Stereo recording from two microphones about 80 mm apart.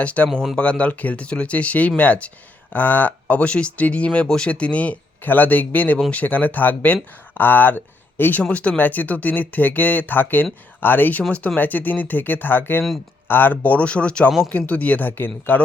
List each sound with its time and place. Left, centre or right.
0.0 s speech: centre